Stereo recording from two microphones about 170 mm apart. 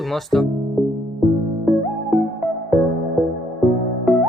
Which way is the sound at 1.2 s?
Centre (ahead or behind).